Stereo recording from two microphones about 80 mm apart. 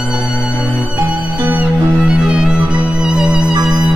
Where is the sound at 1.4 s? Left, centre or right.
Right.